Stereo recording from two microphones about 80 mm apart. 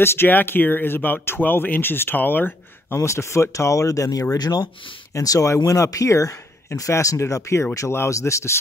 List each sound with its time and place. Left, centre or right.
0.0 s speech: left